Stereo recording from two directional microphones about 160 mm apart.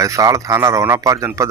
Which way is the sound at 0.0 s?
20° right (ahead or behind).